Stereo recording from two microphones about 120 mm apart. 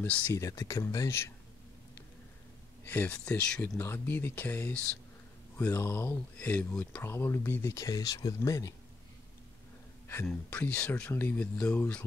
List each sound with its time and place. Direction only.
0.3 s speech: 25° left (ahead or behind)
2.8 s speech: 15° left (ahead or behind)
7.0 s speech: 20° left (ahead or behind)
10.5 s speech: 10° left (ahead or behind)